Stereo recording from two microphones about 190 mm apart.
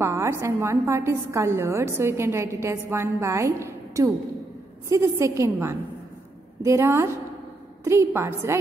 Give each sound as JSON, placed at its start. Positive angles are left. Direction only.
{"t": 0.0, "sound": "a woman's voice", "side_deg": -15}